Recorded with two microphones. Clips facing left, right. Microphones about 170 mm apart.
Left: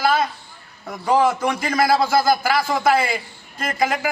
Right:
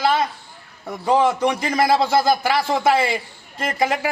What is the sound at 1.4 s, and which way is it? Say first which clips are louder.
A man's voice: right 1 dB; 20° right (ahead or behind).